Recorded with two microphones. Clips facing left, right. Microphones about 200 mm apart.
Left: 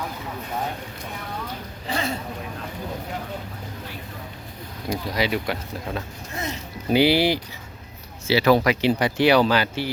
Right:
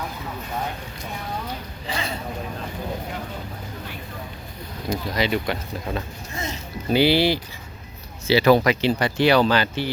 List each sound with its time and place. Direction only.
1.9 s a sound: 50° left (ahead or behind)
4.9 s speech: 10° left (ahead or behind)
8.3 s speech: 5° left (ahead or behind)